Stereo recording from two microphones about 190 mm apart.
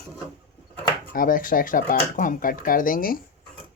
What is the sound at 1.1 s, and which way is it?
Speech, 45° left (ahead or behind).